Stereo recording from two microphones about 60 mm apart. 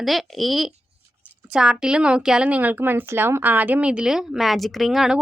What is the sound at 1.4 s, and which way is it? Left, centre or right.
A woman's voice, centre.